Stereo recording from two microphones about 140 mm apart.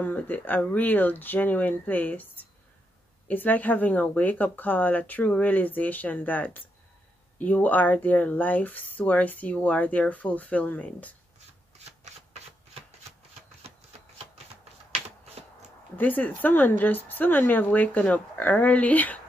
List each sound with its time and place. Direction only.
0.0 s speech: 10° left (ahead or behind)
13.7 s typewriter: 45° right (ahead or behind)
16.0 s speech: 10° left (ahead or behind)